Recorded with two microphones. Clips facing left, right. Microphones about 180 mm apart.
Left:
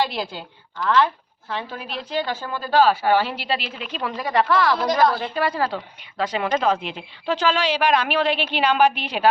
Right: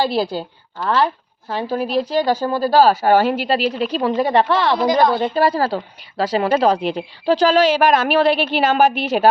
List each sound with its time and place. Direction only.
0.0 s a woman's voice: 35° right (ahead or behind)